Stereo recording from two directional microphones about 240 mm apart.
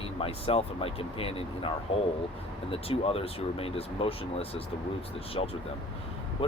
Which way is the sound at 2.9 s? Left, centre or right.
Left.